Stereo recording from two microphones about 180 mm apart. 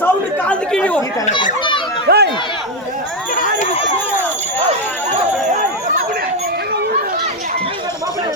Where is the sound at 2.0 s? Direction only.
65° right (ahead or behind).